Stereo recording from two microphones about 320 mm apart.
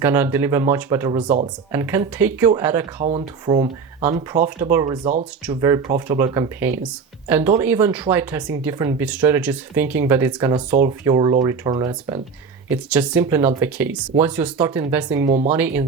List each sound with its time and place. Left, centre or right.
0.0 s speech: centre
5.0 s speech: right
5.5 s speech: centre